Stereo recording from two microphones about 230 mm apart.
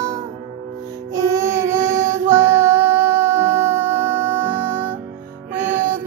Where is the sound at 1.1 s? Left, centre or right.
Centre.